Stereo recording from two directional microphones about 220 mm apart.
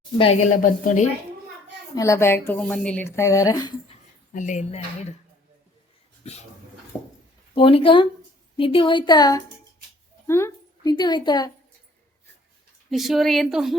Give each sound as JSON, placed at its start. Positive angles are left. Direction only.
{"t": 0.6, "sound": "a woman's voice", "side_deg": 35}
{"t": 2.0, "sound": "speech", "side_deg": 15}
{"t": 4.4, "sound": "a woman's voice", "side_deg": 35}
{"t": 7.5, "sound": "a woman's voice", "side_deg": 25}
{"t": 12.9, "sound": "a woman's voice", "side_deg": 0}